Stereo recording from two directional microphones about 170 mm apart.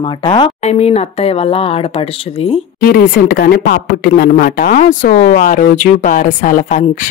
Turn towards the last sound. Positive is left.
turn(degrees=50)  # may be behind; listen again after turning